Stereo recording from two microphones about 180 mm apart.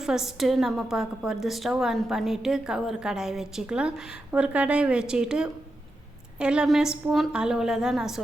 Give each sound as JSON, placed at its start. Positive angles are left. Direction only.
{"t": 0.0, "sound": "a woman's voice", "side_deg": -5}